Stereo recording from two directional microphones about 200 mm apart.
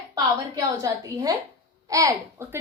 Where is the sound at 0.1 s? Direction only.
15° right (ahead or behind).